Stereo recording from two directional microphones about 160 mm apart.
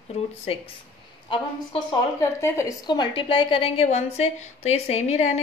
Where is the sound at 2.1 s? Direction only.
15° left (ahead or behind); by 5.4 s 45° left (ahead or behind).